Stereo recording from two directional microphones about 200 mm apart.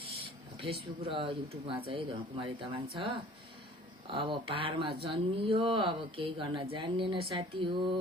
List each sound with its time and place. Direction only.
0.6 s speech: 25° right (ahead or behind)